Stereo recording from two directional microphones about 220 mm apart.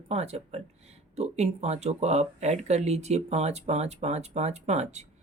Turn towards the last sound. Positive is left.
turn(degrees=-30)  # may be behind; listen again after turning